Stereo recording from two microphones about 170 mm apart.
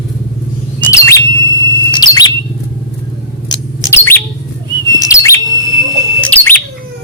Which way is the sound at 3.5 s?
15° left (ahead or behind).